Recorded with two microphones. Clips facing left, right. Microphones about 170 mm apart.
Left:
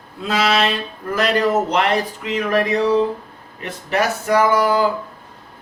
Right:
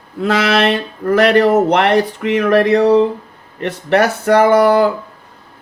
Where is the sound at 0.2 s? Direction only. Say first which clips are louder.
Right 4 dB; 65° right (ahead or behind).